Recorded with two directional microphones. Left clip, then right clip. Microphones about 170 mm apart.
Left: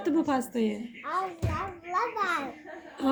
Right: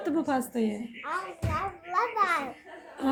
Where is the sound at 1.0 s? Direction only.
35° right (ahead or behind).